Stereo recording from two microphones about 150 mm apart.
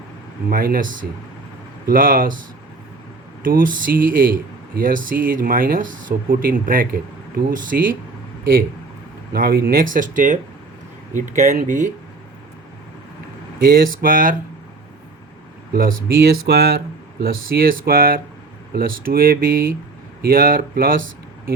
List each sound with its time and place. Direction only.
0.5 s speech: 75° right (ahead or behind)
1.9 s speech: 70° right (ahead or behind)
3.4 s speech: 65° right (ahead or behind)
9.3 s speech: 90° right; by 11.9 s 60° right (ahead or behind)
13.6 s speech: 75° right (ahead or behind)
15.7 s speech: 70° right (ahead or behind)